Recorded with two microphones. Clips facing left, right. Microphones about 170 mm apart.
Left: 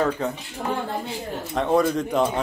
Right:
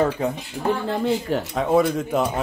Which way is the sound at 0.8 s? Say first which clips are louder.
Right 7 dB; 85° right.